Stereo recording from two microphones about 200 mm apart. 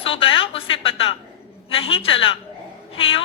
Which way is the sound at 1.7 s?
25° left (ahead or behind).